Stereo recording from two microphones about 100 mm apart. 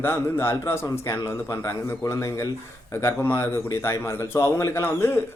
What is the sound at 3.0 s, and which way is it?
Speech, 25° left (ahead or behind).